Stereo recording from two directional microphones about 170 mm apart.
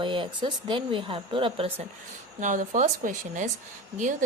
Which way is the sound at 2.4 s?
50° right (ahead or behind).